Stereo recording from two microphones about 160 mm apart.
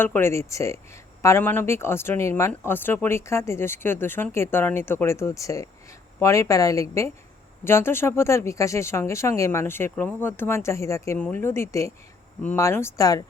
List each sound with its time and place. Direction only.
0.0 s a woman's voice: 15° left (ahead or behind)